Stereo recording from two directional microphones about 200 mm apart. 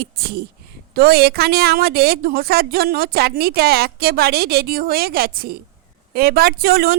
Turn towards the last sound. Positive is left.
turn(degrees=-50)  # may be behind; listen again after turning